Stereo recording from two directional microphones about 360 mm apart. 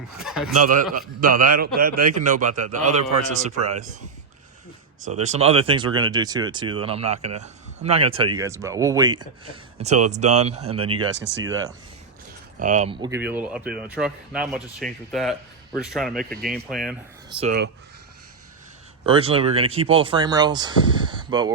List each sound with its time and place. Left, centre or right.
0.2 s a sound: centre
0.6 s a man's voice: right
4.9 s speech: centre
11.2 s speech: right
12.5 s speech: centre
17.3 s a man's voice: right
19.0 s speech: centre